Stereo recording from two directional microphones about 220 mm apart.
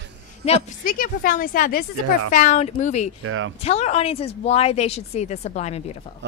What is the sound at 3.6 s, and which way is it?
A woman's voice, 30° left (ahead or behind).